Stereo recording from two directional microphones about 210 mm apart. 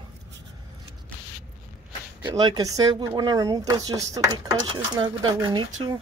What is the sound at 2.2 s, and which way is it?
Speech, 20° right (ahead or behind).